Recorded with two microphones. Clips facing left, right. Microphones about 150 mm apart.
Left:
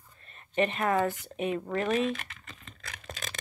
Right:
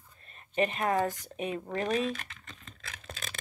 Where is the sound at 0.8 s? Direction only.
35° right (ahead or behind).